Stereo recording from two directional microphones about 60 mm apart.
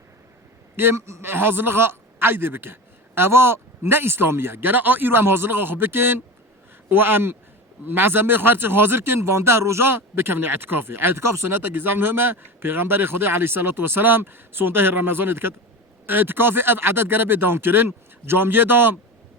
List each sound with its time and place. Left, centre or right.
0.8 s speech: right